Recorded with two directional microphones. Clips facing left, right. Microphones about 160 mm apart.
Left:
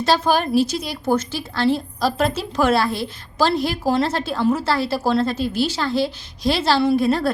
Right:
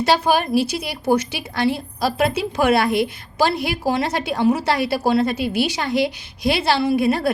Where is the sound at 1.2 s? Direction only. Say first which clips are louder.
Left 1 dB; 75° right (ahead or behind).